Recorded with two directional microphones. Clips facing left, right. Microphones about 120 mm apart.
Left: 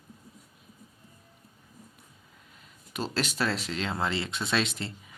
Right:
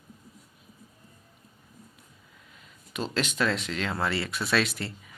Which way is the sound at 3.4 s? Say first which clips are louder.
Right 3 dB; 35° left (ahead or behind).